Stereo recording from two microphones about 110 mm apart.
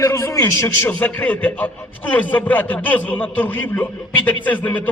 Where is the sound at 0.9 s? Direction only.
15° left (ahead or behind).